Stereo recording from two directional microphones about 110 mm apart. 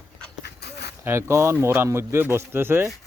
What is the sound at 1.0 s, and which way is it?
Speech, 25° right (ahead or behind).